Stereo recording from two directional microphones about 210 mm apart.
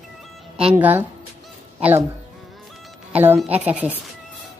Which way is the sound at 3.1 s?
10° right (ahead or behind).